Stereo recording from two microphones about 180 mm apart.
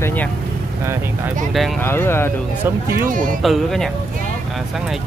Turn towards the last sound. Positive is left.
turn(degrees=0)  # may be behind; listen again after turning